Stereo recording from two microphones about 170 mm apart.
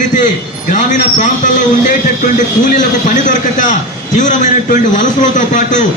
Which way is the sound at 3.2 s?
50° left (ahead or behind).